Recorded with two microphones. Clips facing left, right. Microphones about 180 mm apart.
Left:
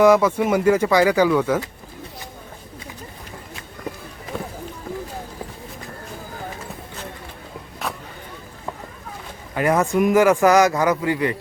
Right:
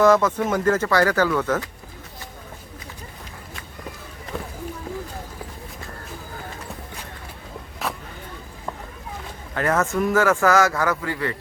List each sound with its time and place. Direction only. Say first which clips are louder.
0.0 s a man's voice: left 2 dB; 10° left (ahead or behind)
7.8 s vehicle: even; centre (ahead or behind)
9.6 s a man's voice: left 3 dB; 15° left (ahead or behind)